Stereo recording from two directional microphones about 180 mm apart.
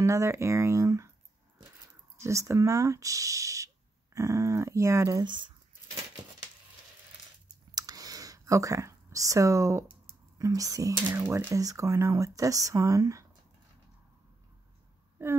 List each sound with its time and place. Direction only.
0.0 s speech: 15° right (ahead or behind)
2.2 s speech: 15° right (ahead or behind)
7.7 s a sound: 20° right (ahead or behind)
10.4 s speech: 20° right (ahead or behind)
15.2 s speech: 15° right (ahead or behind)